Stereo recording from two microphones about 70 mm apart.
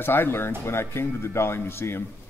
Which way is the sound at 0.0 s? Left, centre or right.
Left.